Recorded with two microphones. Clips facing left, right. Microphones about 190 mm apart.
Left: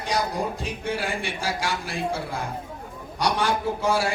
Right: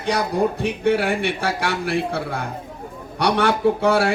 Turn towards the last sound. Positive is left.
turn(degrees=-65)  # may be behind; listen again after turning